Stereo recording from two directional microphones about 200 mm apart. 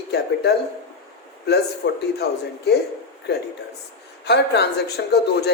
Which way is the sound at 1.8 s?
65° left (ahead or behind).